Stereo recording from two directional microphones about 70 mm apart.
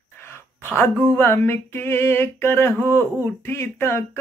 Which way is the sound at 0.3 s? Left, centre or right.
Left.